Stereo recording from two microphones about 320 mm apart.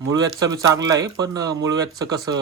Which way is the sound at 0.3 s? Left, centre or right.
Centre.